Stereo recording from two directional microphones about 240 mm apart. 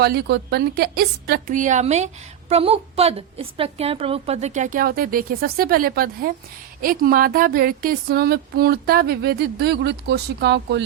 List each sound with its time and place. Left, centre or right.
0.0 s a woman's voice: right